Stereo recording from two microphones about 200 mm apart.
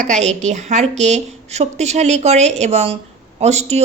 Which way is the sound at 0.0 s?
35° right (ahead or behind).